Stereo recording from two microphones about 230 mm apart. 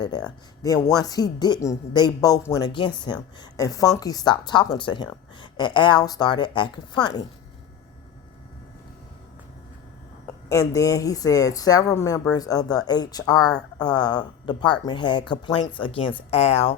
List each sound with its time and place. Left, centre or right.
0.0 s speech: centre
10.8 s speech: centre